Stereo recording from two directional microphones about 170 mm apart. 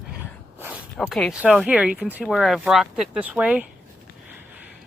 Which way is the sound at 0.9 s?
Centre (ahead or behind).